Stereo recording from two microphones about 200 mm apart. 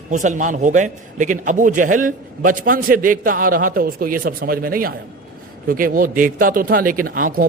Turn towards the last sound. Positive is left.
turn(degrees=-45)  # may be behind; listen again after turning